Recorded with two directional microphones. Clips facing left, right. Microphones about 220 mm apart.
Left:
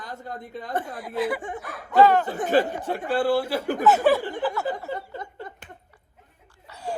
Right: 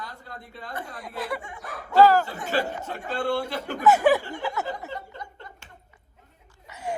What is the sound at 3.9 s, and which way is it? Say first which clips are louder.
Speech: right 1 dB; 15° right (ahead or behind).